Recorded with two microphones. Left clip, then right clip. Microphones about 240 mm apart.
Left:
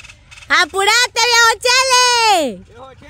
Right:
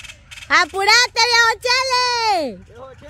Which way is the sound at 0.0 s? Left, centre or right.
Right.